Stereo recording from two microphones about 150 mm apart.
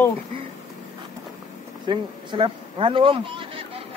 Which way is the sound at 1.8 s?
35° right (ahead or behind).